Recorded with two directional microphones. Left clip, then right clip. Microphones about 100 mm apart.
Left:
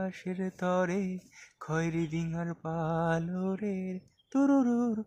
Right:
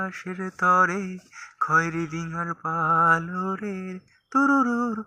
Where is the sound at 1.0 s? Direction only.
50° left (ahead or behind).